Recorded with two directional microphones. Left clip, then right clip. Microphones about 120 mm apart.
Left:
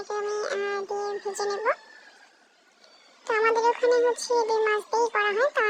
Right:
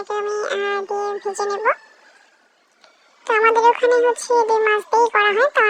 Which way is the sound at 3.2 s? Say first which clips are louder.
Right 8 dB; 30° right (ahead or behind).